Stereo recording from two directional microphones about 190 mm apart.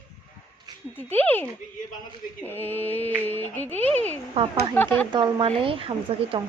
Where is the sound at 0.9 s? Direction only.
10° left (ahead or behind).